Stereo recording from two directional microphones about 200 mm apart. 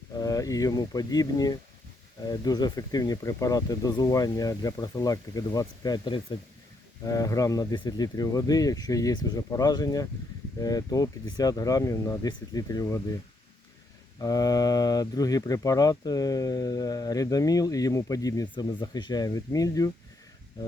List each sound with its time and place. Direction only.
0.2 s speech: 20° left (ahead or behind)
14.2 s speech: 20° left (ahead or behind)